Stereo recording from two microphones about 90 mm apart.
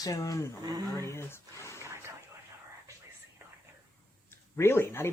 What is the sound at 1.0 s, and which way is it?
Speech, 30° left (ahead or behind).